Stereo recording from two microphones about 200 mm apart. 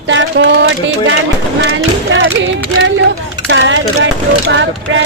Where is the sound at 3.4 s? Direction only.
70° right (ahead or behind).